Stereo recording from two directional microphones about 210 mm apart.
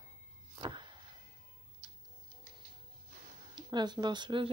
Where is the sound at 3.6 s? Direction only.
20° right (ahead or behind).